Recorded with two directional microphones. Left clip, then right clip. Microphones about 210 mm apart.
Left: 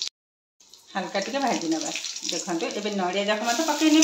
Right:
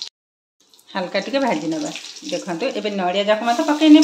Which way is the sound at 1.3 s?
55° right (ahead or behind).